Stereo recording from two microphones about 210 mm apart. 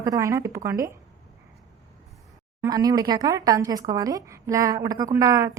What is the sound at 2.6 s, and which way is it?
A woman's voice, 15° right (ahead or behind).